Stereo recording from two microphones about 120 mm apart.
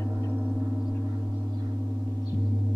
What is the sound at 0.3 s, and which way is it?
Gong, 5° left (ahead or behind).